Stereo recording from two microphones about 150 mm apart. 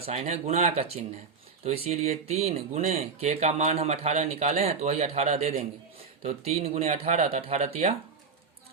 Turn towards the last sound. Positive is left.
turn(degrees=-50)  # may be behind; listen again after turning